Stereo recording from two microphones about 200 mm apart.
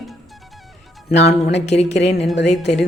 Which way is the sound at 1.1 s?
35° left (ahead or behind).